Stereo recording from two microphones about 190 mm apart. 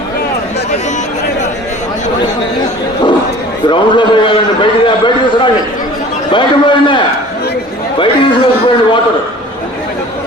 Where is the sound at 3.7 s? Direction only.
25° left (ahead or behind).